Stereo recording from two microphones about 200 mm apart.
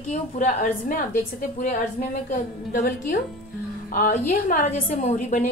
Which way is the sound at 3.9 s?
40° left (ahead or behind).